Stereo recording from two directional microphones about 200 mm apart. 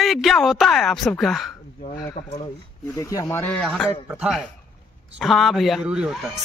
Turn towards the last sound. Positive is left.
turn(degrees=-5)  # may be behind; listen again after turning